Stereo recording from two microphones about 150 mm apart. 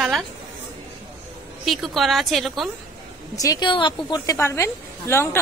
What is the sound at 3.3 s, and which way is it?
A woman's voice, 25° left (ahead or behind).